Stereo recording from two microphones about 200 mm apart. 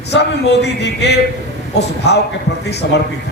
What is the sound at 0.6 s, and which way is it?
A man's voice, 60° left (ahead or behind).